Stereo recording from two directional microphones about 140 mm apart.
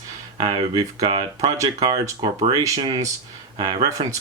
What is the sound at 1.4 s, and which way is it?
Speech, 25° right (ahead or behind).